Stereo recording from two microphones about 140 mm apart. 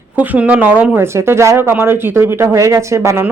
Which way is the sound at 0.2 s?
10° right (ahead or behind).